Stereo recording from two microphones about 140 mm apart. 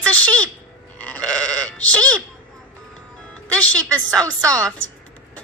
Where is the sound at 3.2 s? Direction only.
10° left (ahead or behind).